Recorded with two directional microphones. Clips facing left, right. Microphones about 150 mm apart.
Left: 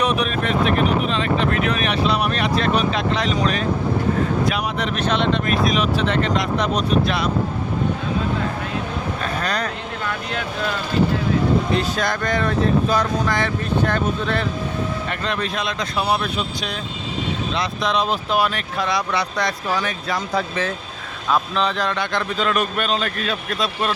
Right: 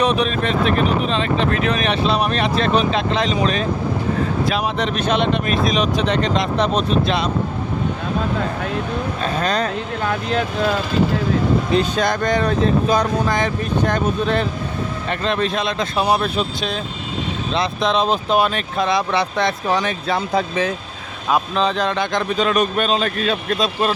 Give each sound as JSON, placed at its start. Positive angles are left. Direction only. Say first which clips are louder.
{"t": 0.0, "sound": "speech", "louder": "right 3 dB", "side_deg": -30}
{"t": 5.1, "sound": "speech", "louder": "even", "side_deg": -15}
{"t": 9.2, "sound": "speech", "louder": "right 5 dB", "side_deg": -25}
{"t": 11.7, "sound": "speech", "louder": "right 3 dB", "side_deg": -20}